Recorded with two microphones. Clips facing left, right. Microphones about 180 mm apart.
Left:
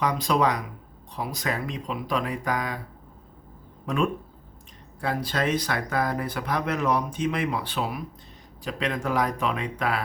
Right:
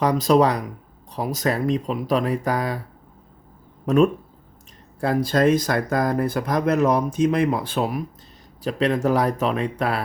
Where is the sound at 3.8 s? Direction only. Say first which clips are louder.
Right 8 dB; 45° right (ahead or behind).